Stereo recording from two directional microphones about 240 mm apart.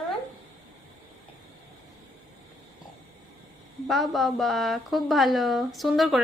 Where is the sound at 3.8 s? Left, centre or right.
Centre.